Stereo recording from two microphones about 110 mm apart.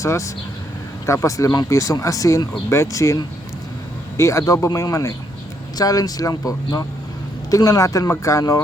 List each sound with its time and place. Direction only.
0.0 s speech: 30° left (ahead or behind)